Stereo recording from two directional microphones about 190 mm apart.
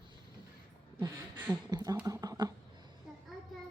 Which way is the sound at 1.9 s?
15° right (ahead or behind).